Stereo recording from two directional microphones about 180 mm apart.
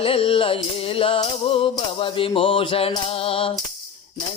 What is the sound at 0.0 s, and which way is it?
Music, 30° left (ahead or behind).